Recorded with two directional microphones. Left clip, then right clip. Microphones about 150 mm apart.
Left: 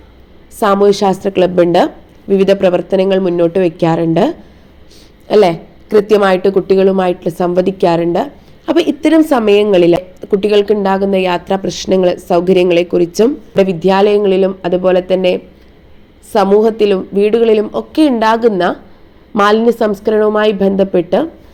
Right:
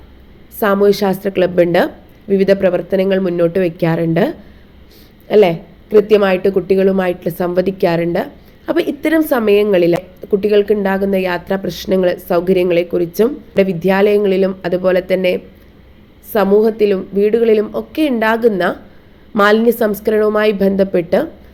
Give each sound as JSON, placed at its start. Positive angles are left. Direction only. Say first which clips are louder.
{"t": 0.6, "sound": "speech", "louder": "left 3 dB", "side_deg": 25}
{"t": 2.2, "sound": "speech", "louder": "left 2 dB", "side_deg": 35}
{"t": 5.3, "sound": "a woman's voice", "louder": "left 1 dB", "side_deg": 45}